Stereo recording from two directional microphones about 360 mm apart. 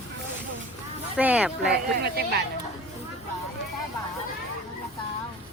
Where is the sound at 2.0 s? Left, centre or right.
Right.